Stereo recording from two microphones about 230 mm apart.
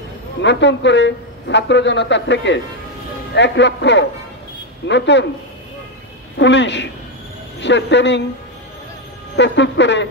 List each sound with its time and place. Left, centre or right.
0.4 s a woman's voice: left
6.3 s a woman's voice: left
9.4 s a woman's voice: left